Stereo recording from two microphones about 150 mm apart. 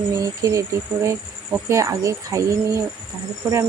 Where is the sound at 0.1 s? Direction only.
20° right (ahead or behind).